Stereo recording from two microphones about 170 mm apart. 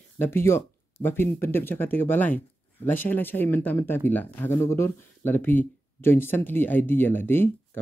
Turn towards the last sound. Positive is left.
turn(degrees=15)  # may be behind; listen again after turning